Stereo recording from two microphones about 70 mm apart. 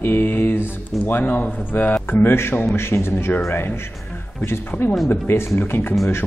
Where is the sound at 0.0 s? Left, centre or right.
Left.